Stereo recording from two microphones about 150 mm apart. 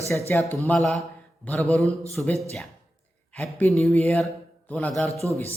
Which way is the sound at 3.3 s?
15° left (ahead or behind).